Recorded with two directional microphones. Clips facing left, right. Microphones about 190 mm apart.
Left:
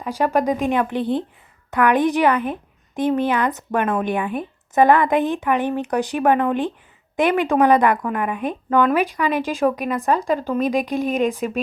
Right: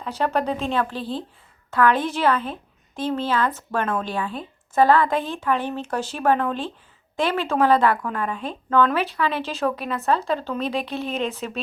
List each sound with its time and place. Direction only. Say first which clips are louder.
0.0 s a woman's voice: left 4 dB; 10° left (ahead or behind)